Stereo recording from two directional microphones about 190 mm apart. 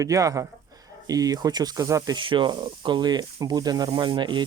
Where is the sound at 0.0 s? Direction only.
15° right (ahead or behind).